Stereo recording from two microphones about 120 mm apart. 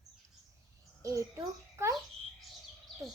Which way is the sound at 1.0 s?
25° right (ahead or behind).